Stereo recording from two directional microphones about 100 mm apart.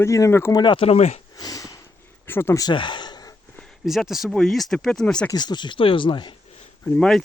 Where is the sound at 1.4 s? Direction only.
40° left (ahead or behind).